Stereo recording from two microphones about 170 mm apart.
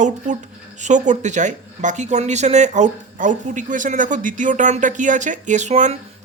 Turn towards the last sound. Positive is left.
turn(degrees=-40)  # may be behind; listen again after turning